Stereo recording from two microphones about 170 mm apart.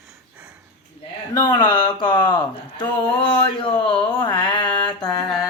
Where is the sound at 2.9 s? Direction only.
30° left (ahead or behind).